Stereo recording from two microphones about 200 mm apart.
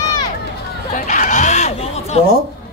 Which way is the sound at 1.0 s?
40° left (ahead or behind).